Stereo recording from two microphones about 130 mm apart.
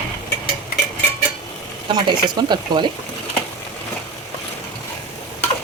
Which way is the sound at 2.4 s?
35° right (ahead or behind).